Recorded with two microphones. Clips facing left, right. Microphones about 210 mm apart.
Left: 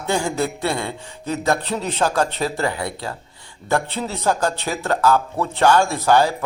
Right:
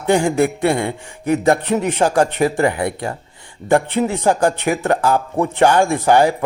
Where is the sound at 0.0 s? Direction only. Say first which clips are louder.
Right 7 dB; 15° right (ahead or behind).